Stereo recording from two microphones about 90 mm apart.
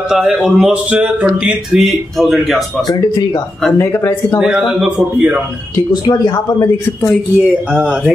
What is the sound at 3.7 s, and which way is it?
Speech, 30° left (ahead or behind).